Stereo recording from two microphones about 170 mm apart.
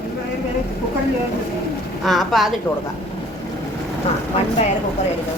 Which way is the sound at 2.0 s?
Centre (ahead or behind).